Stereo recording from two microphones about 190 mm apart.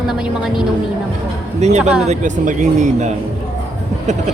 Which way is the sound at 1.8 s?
5° right (ahead or behind).